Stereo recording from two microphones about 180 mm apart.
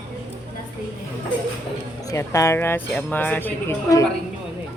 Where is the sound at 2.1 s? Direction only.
15° left (ahead or behind).